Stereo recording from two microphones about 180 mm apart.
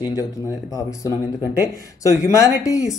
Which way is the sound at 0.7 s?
20° left (ahead or behind).